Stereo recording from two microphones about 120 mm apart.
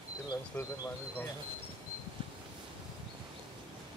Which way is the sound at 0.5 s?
15° left (ahead or behind).